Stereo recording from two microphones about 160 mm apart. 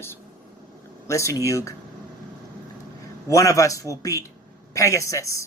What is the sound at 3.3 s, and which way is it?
A man's voice, 20° left (ahead or behind).